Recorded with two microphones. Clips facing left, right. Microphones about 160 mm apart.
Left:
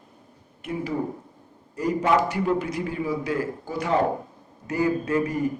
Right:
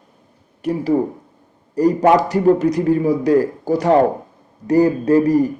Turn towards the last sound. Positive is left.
turn(degrees=-35)  # may be behind; listen again after turning